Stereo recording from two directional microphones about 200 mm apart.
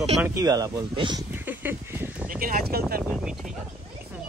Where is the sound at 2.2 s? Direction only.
45° right (ahead or behind).